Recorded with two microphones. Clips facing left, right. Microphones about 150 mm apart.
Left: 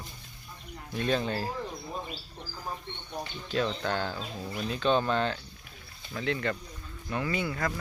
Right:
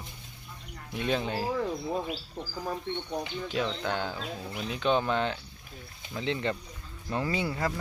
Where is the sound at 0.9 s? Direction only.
15° right (ahead or behind).